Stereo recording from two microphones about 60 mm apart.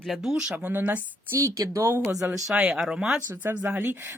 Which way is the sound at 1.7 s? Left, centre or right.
Right.